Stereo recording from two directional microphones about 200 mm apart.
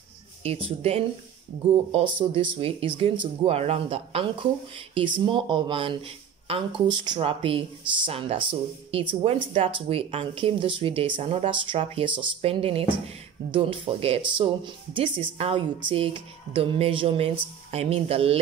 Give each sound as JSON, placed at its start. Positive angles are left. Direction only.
{"t": 0.4, "sound": "speech", "side_deg": -30}